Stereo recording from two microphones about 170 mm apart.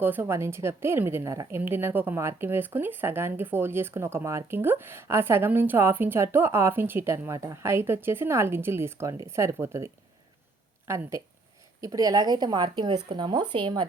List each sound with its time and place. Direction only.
0.0 s a woman's voice: 10° right (ahead or behind); by 13.8 s 30° right (ahead or behind)